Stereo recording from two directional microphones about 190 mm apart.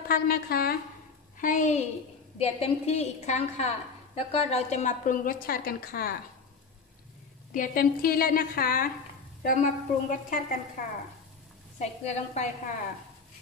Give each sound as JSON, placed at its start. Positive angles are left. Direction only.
{"t": 0.1, "sound": "a woman's voice", "side_deg": 55}
{"t": 1.4, "sound": "a woman's voice", "side_deg": 40}
{"t": 2.3, "sound": "a woman's voice", "side_deg": 30}
{"t": 7.5, "sound": "a woman's voice", "side_deg": 45}
{"t": 11.8, "sound": "a woman's voice", "side_deg": 35}